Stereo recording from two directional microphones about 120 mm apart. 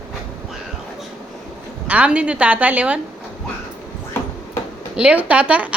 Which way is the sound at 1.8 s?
10° right (ahead or behind).